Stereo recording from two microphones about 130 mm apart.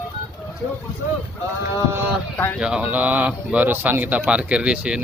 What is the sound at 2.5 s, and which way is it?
A man's voice, 5° right (ahead or behind).